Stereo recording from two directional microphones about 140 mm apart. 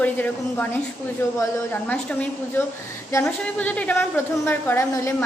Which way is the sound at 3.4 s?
10° left (ahead or behind).